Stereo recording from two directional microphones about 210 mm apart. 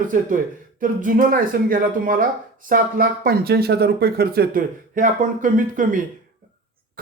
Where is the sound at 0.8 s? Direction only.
40° right (ahead or behind).